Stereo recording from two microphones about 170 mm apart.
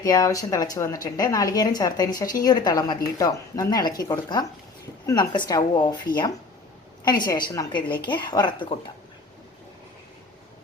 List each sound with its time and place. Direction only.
0.0 s speech: 20° left (ahead or behind)